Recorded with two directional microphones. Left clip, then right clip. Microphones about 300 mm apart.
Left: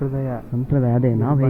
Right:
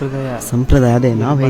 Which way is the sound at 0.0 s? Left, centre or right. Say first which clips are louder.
Right 4 dB; centre.